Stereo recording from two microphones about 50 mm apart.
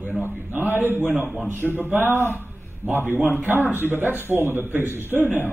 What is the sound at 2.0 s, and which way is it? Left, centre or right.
Speech, left.